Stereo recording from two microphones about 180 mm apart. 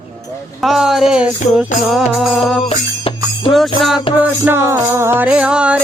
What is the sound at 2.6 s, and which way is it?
Music, 30° left (ahead or behind).